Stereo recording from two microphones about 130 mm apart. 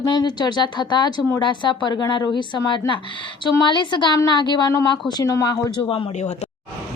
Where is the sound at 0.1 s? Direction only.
35° left (ahead or behind).